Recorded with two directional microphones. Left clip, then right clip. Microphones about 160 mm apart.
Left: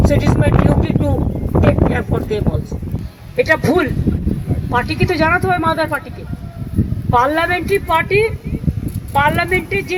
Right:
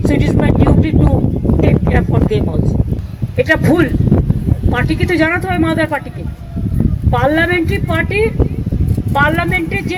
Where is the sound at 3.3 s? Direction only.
30° left (ahead or behind).